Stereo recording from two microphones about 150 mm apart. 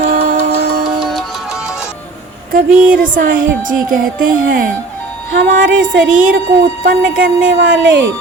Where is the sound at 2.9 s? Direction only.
65° right (ahead or behind).